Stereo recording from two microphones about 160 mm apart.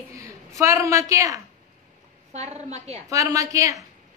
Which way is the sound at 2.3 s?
45° right (ahead or behind).